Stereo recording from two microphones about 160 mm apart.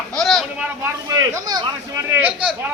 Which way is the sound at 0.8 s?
20° right (ahead or behind).